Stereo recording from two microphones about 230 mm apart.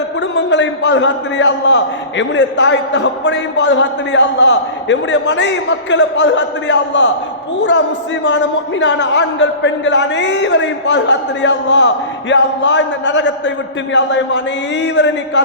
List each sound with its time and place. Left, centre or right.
0.2 s a man's voice: left
8.8 s a man's voice: left